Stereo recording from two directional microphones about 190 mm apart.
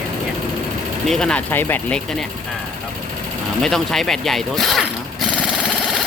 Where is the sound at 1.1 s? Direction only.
5° left (ahead or behind).